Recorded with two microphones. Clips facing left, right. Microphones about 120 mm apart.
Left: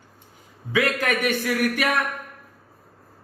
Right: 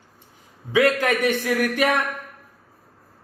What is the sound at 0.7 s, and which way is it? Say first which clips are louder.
Speech: right 4 dB; 25° right (ahead or behind).